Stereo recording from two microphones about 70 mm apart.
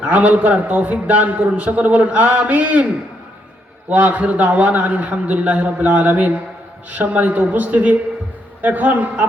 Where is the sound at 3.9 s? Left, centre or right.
Right.